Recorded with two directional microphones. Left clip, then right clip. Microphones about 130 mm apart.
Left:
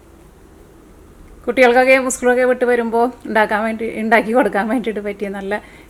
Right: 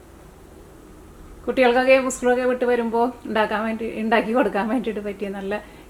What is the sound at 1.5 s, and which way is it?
Speech, 35° left (ahead or behind).